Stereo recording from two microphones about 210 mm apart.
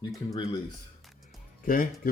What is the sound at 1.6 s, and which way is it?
Speech, 40° left (ahead or behind).